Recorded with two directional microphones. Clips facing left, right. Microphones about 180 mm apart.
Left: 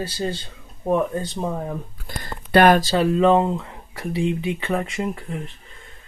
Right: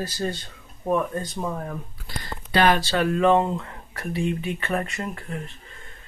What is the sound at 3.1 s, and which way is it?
Speech, 25° left (ahead or behind).